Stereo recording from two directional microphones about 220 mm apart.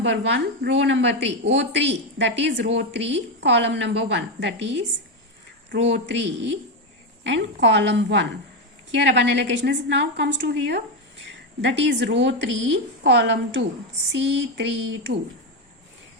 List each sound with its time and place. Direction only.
0.0 s a woman's voice: 55° right (ahead or behind)
5.9 s a woman's voice: 50° right (ahead or behind)
7.3 s a woman's voice: 55° right (ahead or behind)